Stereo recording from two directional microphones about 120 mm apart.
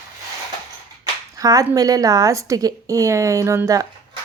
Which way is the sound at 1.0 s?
30° right (ahead or behind).